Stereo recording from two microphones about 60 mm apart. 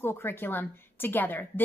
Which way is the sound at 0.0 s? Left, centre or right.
Left.